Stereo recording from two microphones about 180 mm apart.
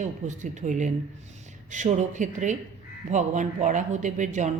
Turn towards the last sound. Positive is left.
turn(degrees=-40)  # may be behind; listen again after turning